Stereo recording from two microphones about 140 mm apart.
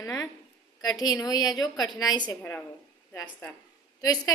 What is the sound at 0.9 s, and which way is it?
A woman's voice, 25° left (ahead or behind).